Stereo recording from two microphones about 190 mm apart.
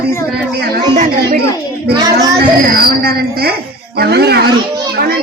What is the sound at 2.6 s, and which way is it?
A woman's voice, 50° right (ahead or behind).